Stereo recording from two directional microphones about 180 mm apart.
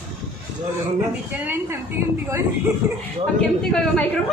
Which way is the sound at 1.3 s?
10° right (ahead or behind).